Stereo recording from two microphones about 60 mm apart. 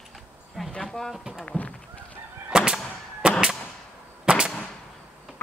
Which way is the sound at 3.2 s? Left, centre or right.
Centre.